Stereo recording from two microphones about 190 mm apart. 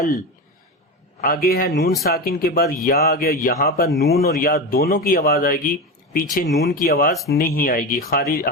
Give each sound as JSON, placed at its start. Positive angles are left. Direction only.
{"t": 1.2, "sound": "speech", "side_deg": 50}
{"t": 3.8, "sound": "speech", "side_deg": 0}
{"t": 4.4, "sound": "speech", "side_deg": 50}